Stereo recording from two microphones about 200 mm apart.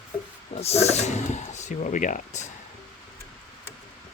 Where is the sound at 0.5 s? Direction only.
30° left (ahead or behind).